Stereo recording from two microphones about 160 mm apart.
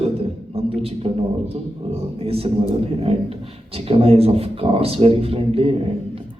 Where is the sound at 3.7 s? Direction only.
40° right (ahead or behind).